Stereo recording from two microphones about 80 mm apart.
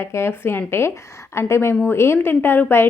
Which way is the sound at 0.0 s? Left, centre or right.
Left.